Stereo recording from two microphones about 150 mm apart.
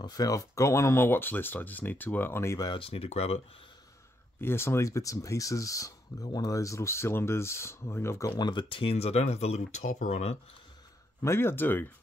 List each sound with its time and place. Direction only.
0.0 s speech: 25° left (ahead or behind)
2.8 s speech: 40° left (ahead or behind)
4.4 s speech: 15° left (ahead or behind)
8.3 s speech: 30° left (ahead or behind); by 10.3 s 50° left (ahead or behind)
11.2 s speech: 15° left (ahead or behind)